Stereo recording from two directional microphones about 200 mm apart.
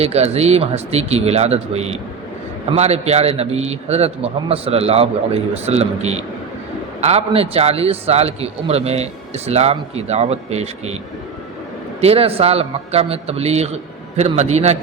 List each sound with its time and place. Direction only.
0.0 s a man's voice: 30° right (ahead or behind)
11.9 s a man's voice: 30° right (ahead or behind)